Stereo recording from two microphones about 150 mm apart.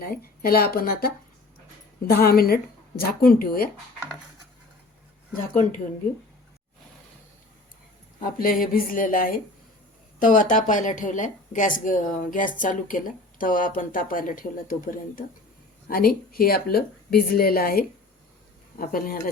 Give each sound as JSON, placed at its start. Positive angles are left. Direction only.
{"t": 0.0, "sound": "a woman's voice", "side_deg": 80}
{"t": 8.2, "sound": "a woman's voice", "side_deg": 70}
{"t": 15.9, "sound": "speech", "side_deg": 90}